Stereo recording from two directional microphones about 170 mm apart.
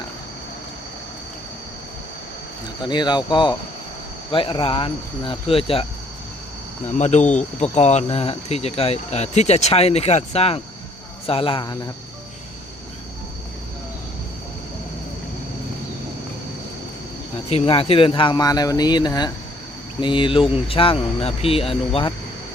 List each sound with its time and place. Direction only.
2.8 s speech: 25° left (ahead or behind)
6.8 s speech: 45° left (ahead or behind); by 11.9 s 25° left (ahead or behind)
17.5 s speech: 35° left (ahead or behind)